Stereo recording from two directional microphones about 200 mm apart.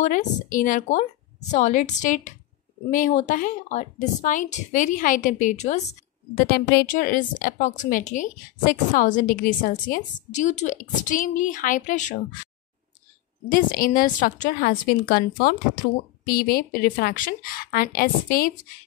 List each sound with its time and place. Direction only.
0.0 s a woman's voice: 40° left (ahead or behind)
6.3 s a woman's voice: 50° left (ahead or behind)
13.5 s a woman's voice: 45° left (ahead or behind)